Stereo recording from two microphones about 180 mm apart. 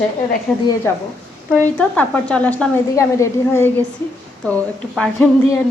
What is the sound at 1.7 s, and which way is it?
A woman's voice, 10° left (ahead or behind).